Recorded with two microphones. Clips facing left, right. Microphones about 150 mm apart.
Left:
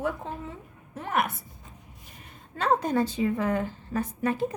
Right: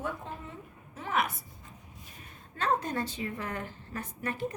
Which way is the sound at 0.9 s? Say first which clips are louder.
Left 3 dB; 60° left (ahead or behind).